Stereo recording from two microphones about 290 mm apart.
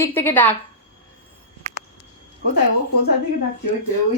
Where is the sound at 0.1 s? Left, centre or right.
Centre.